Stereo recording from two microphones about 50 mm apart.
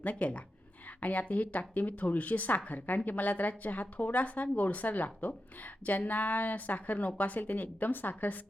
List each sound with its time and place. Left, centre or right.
0.0 s speech: left